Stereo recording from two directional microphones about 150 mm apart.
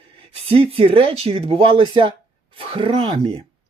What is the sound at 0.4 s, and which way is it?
Speech, 40° right (ahead or behind).